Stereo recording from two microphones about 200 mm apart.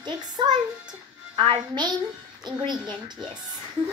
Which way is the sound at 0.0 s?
20° right (ahead or behind).